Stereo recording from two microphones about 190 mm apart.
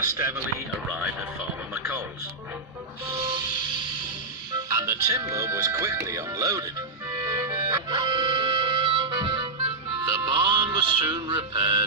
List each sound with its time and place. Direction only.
0.0 s speech: 15° right (ahead or behind)
0.9 s speech: 5° right (ahead or behind)
1.7 s music: 15° right (ahead or behind)
3.1 s train: 25° right (ahead or behind)
4.5 s music: 15° right (ahead or behind)